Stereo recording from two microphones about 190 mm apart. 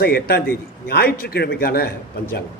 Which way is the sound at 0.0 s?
55° left (ahead or behind).